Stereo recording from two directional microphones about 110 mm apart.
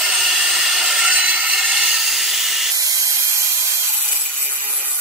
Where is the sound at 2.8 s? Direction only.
30° right (ahead or behind).